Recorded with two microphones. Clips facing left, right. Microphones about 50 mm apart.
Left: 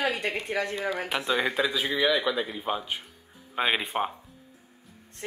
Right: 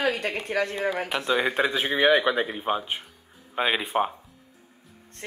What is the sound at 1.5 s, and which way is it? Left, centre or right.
A man's voice, right.